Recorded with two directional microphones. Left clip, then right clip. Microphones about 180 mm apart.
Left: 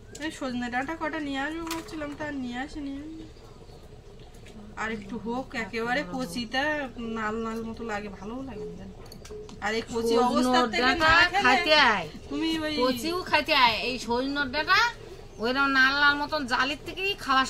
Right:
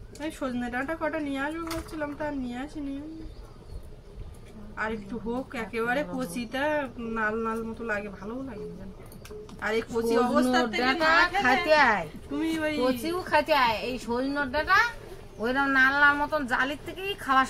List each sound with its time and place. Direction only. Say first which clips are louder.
0.2 s a woman's voice: even; centre (ahead or behind)
4.7 s a woman's voice: right 1 dB; 5° right (ahead or behind)
9.6 s a woman's voice: right 1 dB; centre (ahead or behind)
10.8 s speech: left 1 dB; 10° left (ahead or behind)
12.3 s a woman's voice: even; 5° right (ahead or behind)
13.0 s speech: even; 10° left (ahead or behind)